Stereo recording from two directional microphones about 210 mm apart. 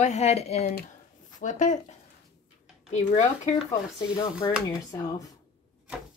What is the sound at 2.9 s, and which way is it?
Speech, 35° left (ahead or behind).